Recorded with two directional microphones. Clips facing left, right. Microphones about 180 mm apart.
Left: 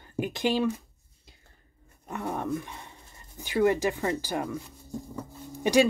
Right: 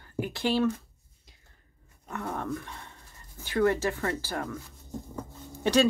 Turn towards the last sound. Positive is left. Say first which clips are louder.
# left 1 dB
turn(degrees=15)  # may be behind; listen again after turning